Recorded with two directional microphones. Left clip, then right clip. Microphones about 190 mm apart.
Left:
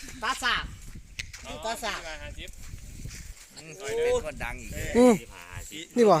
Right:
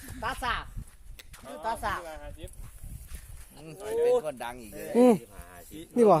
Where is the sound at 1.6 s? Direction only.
65° left (ahead or behind).